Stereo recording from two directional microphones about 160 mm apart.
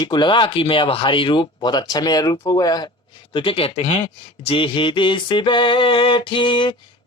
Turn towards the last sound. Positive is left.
turn(degrees=30)  # may be behind; listen again after turning